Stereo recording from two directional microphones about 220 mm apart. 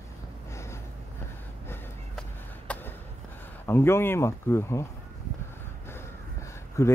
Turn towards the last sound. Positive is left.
turn(degrees=10)  # may be behind; listen again after turning